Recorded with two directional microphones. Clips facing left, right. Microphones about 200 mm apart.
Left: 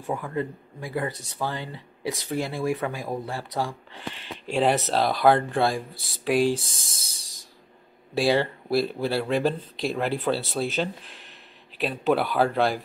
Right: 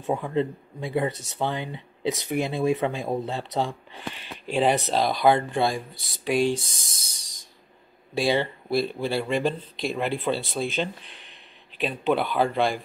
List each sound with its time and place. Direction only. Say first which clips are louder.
0.0 s speech: right 4 dB; 25° right (ahead or behind)
4.5 s speech: even; centre (ahead or behind)
5.9 s speech: left 2 dB; 30° left (ahead or behind)
6.2 s speech: left 1 dB; centre (ahead or behind)
7.1 s spray: left 2 dB; 30° left (ahead or behind)
8.1 s speech: left 1 dB; centre (ahead or behind)